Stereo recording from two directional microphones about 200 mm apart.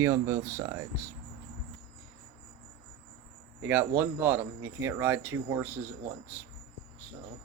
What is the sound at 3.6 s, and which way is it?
Speech, 10° right (ahead or behind).